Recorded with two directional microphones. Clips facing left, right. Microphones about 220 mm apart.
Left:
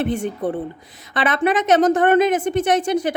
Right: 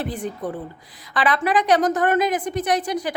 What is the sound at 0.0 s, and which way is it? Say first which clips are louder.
Speech: left 6 dB; 25° left (ahead or behind).